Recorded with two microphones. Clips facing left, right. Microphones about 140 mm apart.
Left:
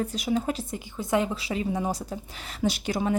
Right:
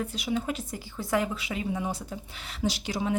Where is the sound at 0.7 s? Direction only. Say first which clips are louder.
Left 2 dB; 20° left (ahead or behind).